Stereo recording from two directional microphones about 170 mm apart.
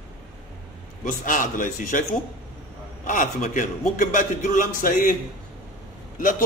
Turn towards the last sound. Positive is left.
turn(degrees=55)  # may be behind; listen again after turning